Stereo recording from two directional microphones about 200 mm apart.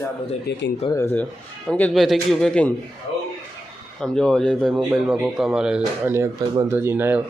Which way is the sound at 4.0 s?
Centre (ahead or behind).